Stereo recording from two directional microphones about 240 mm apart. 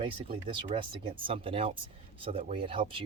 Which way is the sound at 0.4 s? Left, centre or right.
Right.